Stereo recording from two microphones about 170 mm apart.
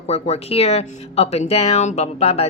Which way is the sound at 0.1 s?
40° left (ahead or behind).